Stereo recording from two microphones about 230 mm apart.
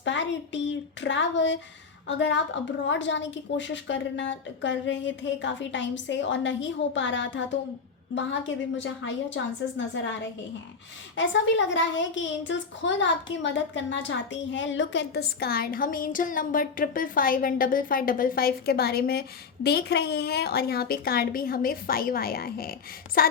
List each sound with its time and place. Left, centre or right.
0.0 s a woman's voice: left
11.2 s a woman's voice: left